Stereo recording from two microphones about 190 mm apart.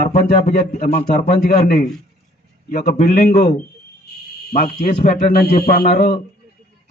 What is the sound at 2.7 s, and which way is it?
Speech, 50° left (ahead or behind).